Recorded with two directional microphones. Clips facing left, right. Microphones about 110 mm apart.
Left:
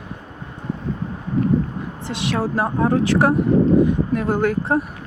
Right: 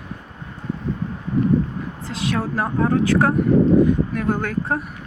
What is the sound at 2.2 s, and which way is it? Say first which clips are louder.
A woman's voice: left 1 dB; 30° left (ahead or behind).